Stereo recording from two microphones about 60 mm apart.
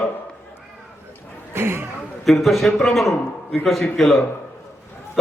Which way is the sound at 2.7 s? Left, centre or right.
Centre.